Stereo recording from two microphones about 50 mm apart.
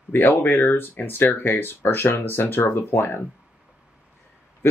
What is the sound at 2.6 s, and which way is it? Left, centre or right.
Speech, left.